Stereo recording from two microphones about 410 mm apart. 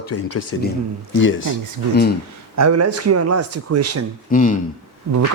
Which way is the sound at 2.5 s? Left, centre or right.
Right.